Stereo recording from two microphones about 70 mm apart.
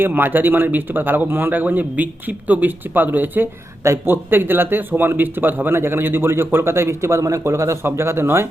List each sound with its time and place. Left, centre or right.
0.0 s a man's voice: right